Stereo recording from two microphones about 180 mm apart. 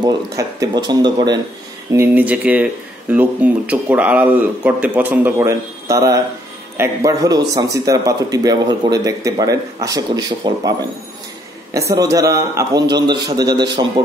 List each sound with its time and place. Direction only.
0.0 s a man's voice: 20° right (ahead or behind)
1.9 s a man's voice: 10° right (ahead or behind)